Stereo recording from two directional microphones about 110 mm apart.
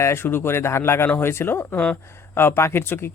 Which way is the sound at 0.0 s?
20° left (ahead or behind).